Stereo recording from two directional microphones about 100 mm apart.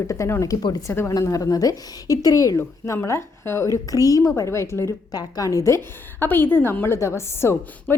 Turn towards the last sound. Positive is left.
turn(degrees=25)  # may be behind; listen again after turning